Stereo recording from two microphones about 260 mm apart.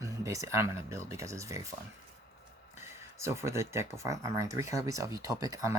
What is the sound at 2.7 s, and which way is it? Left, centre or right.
Speech, centre.